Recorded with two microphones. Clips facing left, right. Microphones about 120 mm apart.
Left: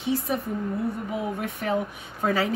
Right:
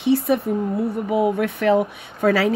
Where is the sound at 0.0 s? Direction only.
70° right (ahead or behind).